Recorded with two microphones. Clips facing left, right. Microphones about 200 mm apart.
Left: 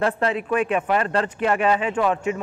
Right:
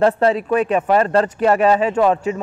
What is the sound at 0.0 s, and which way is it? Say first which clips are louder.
Speech: right 7 dB; 35° right (ahead or behind).